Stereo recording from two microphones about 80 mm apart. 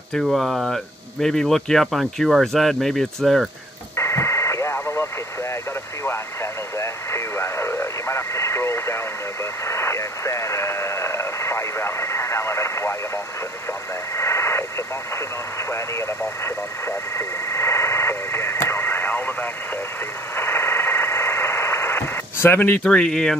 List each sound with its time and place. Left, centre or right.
0.1 s speech: centre
3.9 s radio: left
4.7 s radio: left
6.8 s radio: left
14.1 s radio: left
17.2 s radio: left
20.3 s radio: left
22.8 s speech: centre